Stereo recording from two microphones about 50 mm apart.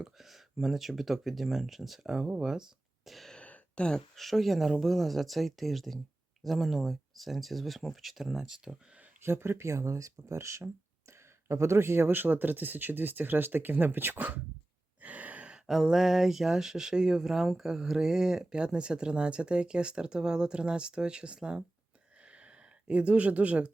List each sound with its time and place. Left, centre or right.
0.2 s speech: centre
3.1 s speech: centre
3.3 s a sound: left
4.1 s speech: centre
9.2 s speech: right
11.4 s speech: right
15.0 s gasp: right
15.5 s speech: centre
22.2 s a sound: right